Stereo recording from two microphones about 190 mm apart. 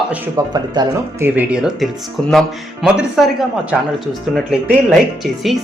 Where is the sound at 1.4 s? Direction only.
5° right (ahead or behind).